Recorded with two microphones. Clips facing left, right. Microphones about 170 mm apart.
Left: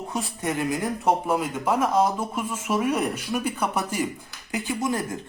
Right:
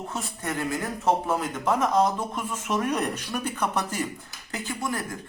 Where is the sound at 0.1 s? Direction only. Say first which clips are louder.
Left 7 dB; 15° left (ahead or behind).